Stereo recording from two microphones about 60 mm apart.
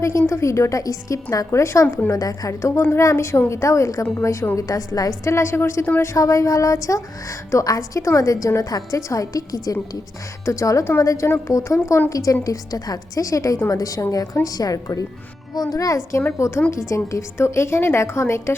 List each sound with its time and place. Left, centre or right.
0.0 s a woman's voice: left
1.5 s a woman's voice: left
2.0 s a woman's voice: left
2.6 s a woman's voice: left
3.5 s a woman's voice: left
4.5 s a woman's voice: left
5.3 s a woman's voice: left
6.1 s a woman's voice: left
10.4 s a woman's voice: left
16.4 s a woman's voice: left